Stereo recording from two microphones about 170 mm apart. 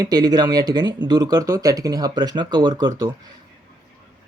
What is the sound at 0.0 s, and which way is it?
Speech, 25° right (ahead or behind).